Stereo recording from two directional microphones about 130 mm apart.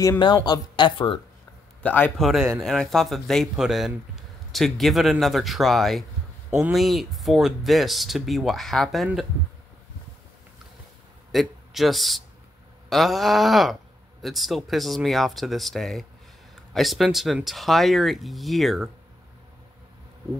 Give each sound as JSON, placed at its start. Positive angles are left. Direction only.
{"t": 0.2, "sound": "speech", "side_deg": 35}
{"t": 1.8, "sound": "a man's voice", "side_deg": 10}
{"t": 2.2, "sound": "speech", "side_deg": -5}
{"t": 11.3, "sound": "speech", "side_deg": 0}